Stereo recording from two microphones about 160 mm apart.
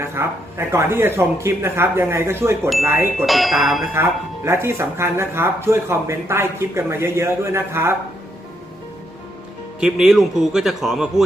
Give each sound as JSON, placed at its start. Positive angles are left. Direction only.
{"t": 0.0, "sound": "speech", "side_deg": -15}
{"t": 3.2, "sound": "a man's voice", "side_deg": 0}
{"t": 3.9, "sound": "speech", "side_deg": -15}
{"t": 9.8, "sound": "a man's voice", "side_deg": -5}